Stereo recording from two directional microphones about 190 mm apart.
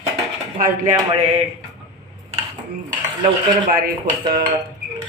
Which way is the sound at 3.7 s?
50° right (ahead or behind).